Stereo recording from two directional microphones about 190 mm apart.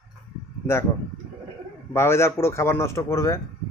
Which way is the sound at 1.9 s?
15° left (ahead or behind).